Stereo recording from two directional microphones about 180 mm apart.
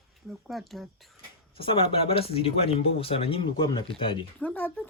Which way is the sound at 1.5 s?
30° left (ahead or behind).